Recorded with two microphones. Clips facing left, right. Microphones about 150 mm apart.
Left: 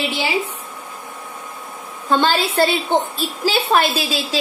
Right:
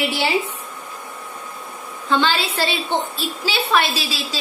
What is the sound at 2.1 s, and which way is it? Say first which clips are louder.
A woman's voice: left 2 dB; 40° left (ahead or behind).